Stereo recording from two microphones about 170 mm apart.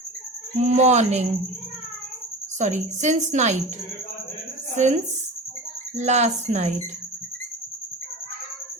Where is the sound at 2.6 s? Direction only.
45° right (ahead or behind).